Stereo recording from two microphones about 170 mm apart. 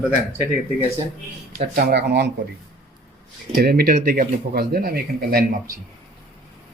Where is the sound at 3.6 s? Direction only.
65° right (ahead or behind).